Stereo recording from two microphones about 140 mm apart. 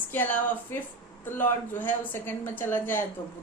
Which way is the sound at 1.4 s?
15° left (ahead or behind).